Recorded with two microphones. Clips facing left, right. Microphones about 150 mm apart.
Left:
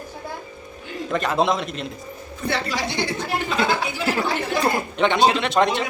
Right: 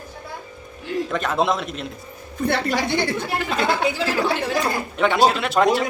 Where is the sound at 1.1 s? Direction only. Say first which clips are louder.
Left 2 dB; centre (ahead or behind).